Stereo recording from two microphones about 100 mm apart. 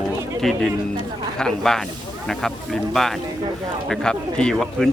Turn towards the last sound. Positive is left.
turn(degrees=5)  # may be behind; listen again after turning